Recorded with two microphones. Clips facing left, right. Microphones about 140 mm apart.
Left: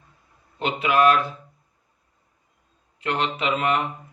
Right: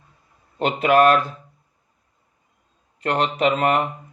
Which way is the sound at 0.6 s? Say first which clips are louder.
Right 4 dB; 45° right (ahead or behind).